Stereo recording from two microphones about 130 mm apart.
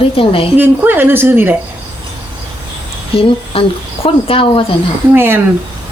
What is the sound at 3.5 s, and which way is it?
A woman's voice, 45° left (ahead or behind).